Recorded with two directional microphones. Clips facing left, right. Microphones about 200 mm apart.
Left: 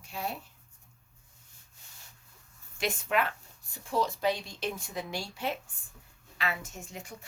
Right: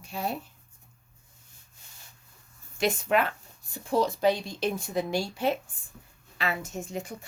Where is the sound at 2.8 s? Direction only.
40° right (ahead or behind).